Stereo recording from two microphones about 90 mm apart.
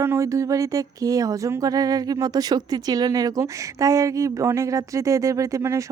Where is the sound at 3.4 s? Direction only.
35° right (ahead or behind).